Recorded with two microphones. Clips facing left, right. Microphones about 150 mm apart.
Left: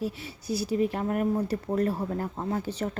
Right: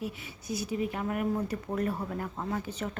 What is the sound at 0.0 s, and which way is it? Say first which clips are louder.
A woman's voice: left 5 dB; 35° left (ahead or behind).